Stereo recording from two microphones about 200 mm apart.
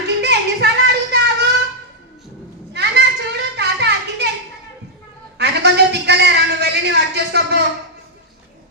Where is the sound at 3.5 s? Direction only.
60° right (ahead or behind).